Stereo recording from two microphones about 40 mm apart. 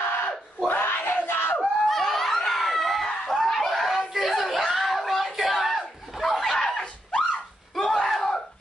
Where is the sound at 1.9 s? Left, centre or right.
Centre.